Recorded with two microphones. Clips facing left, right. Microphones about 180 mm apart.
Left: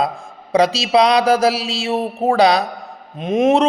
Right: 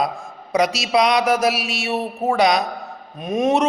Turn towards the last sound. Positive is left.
turn(degrees=25)  # may be behind; listen again after turning